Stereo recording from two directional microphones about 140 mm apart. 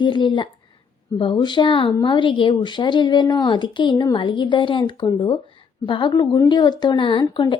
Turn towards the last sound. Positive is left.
turn(degrees=35)  # may be behind; listen again after turning